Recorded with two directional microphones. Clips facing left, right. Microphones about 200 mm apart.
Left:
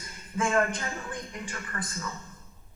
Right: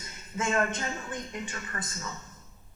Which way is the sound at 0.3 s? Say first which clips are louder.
Left 2 dB; 25° right (ahead or behind).